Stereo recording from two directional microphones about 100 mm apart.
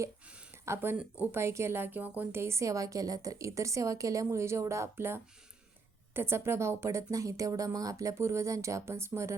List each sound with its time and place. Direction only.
0.6 s a woman's voice: 25° right (ahead or behind)